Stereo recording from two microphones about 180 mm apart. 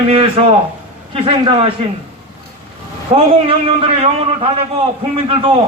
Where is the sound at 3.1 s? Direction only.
30° right (ahead or behind).